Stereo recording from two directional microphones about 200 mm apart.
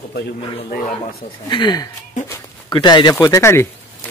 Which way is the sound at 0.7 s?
40° left (ahead or behind).